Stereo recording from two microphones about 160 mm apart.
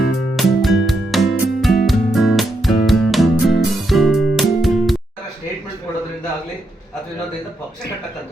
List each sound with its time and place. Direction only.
0.3 s music: centre (ahead or behind)